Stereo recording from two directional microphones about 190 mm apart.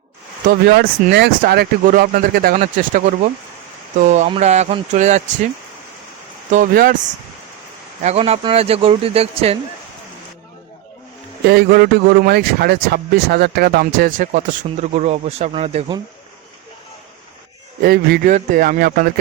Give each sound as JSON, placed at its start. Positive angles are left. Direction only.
{"t": 0.4, "sound": "a man's voice", "side_deg": -60}
{"t": 4.0, "sound": "speech", "side_deg": -35}
{"t": 6.5, "sound": "a man's voice", "side_deg": -45}
{"t": 8.0, "sound": "speech", "side_deg": -35}
{"t": 11.4, "sound": "a man's voice", "side_deg": -55}
{"t": 17.8, "sound": "a man's voice", "side_deg": -50}